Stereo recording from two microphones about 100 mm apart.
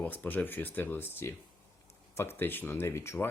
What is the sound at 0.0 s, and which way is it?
Speech, 20° left (ahead or behind).